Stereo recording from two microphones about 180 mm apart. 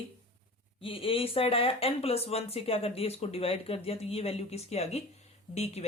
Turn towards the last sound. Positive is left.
turn(degrees=35)  # may be behind; listen again after turning